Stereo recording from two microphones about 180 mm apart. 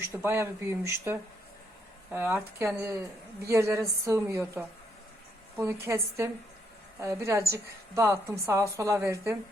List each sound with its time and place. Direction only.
0.0 s a woman's voice: 15° right (ahead or behind)
5.8 s a woman's voice: 15° right (ahead or behind)